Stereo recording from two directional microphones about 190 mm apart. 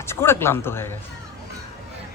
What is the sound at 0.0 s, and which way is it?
Speech, 15° left (ahead or behind).